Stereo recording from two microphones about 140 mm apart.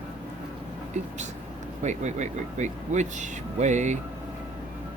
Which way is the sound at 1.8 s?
60° right (ahead or behind).